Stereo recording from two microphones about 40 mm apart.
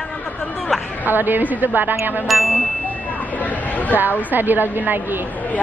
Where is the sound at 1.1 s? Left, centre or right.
Right.